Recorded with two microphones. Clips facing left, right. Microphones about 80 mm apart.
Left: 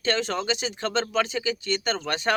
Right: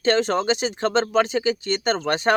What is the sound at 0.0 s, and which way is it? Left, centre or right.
Speech, right.